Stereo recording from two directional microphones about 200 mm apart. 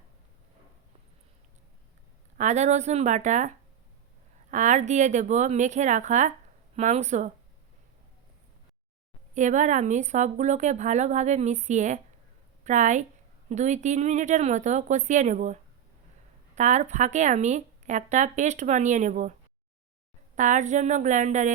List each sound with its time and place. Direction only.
2.4 s speech: 35° right (ahead or behind)
4.5 s speech: 35° right (ahead or behind)
9.3 s speech: 40° right (ahead or behind)
16.6 s speech: 35° right (ahead or behind)
20.3 s speech: 40° right (ahead or behind)